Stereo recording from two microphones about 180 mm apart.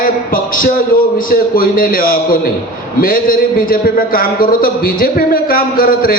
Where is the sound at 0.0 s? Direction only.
50° left (ahead or behind).